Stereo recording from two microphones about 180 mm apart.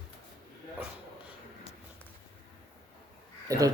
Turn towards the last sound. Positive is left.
turn(degrees=-20)  # may be behind; listen again after turning